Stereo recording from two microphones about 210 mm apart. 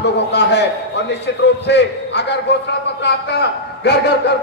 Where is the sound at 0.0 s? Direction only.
55° left (ahead or behind).